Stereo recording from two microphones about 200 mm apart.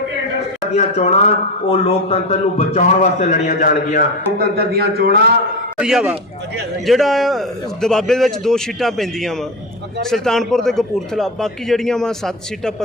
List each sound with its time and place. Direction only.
0.7 s a man's voice: 35° left (ahead or behind)
4.4 s a man's voice: 50° right (ahead or behind)
5.7 s a man's voice: 5° right (ahead or behind)